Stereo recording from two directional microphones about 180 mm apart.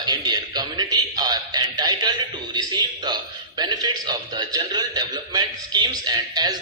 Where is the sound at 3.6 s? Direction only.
25° right (ahead or behind).